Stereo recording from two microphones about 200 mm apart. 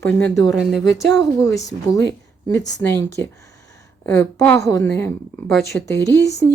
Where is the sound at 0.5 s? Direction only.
Centre (ahead or behind).